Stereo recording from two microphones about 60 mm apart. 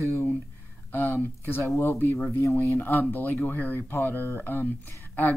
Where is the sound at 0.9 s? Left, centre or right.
Left.